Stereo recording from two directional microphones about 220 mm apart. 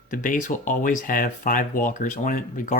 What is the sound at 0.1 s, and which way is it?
Speech, 35° left (ahead or behind).